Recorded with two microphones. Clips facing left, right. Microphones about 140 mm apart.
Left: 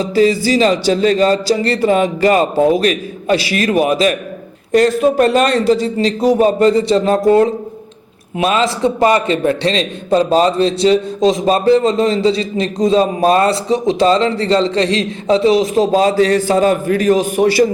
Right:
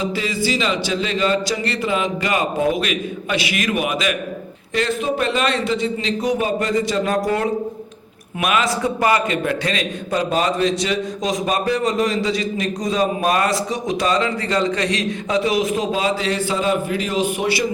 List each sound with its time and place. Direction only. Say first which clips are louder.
0.0 s a man's voice: left 9 dB; 40° left (ahead or behind)